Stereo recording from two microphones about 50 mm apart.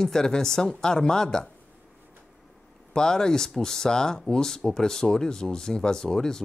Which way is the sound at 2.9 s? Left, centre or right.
Centre.